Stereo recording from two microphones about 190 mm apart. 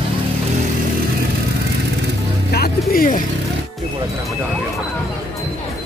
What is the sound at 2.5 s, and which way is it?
Speech, 55° left (ahead or behind).